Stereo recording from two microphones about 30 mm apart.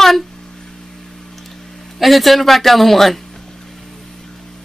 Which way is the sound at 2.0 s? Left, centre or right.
Centre.